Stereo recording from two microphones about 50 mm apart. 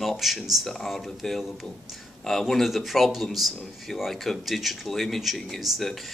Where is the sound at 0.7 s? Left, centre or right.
Centre.